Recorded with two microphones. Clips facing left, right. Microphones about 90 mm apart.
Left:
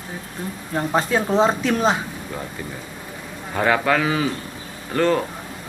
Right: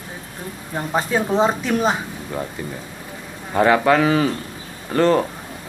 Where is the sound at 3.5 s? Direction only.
20° right (ahead or behind).